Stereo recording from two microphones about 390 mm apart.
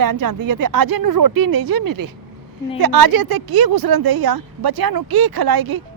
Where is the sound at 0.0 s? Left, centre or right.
Right.